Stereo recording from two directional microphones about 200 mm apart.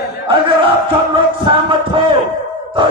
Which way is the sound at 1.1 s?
25° right (ahead or behind).